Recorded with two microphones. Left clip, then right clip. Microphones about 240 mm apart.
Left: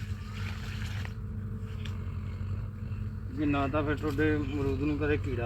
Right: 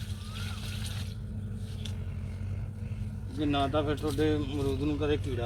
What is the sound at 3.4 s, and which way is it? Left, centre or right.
Speech, centre.